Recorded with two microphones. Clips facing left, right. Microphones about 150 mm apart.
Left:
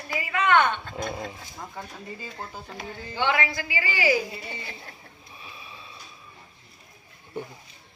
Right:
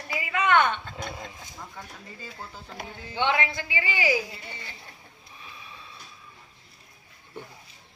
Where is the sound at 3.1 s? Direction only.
20° right (ahead or behind).